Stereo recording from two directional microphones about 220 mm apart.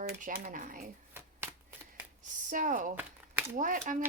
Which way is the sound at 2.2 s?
35° right (ahead or behind).